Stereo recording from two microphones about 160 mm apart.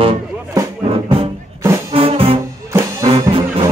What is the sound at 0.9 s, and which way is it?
Music, 35° right (ahead or behind).